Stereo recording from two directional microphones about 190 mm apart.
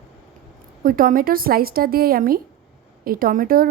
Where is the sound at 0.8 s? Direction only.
50° right (ahead or behind).